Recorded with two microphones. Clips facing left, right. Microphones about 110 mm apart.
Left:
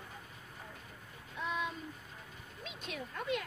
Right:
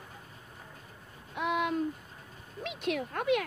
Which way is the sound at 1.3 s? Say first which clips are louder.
Right 8 dB; 70° right (ahead or behind).